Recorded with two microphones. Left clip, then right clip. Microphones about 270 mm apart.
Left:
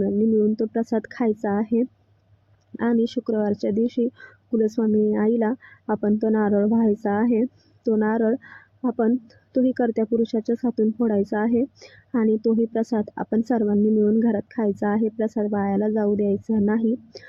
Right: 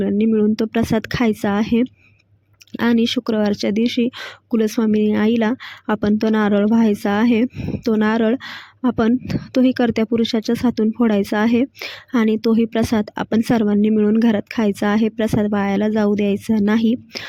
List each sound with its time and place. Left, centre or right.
0.0 s speech: right
0.8 s speech: right
3.0 s speech: right
3.2 s speech: right
7.9 s speech: right
9.8 s speech: right
10.2 s speech: right
10.8 s speech: right
12.1 s speech: right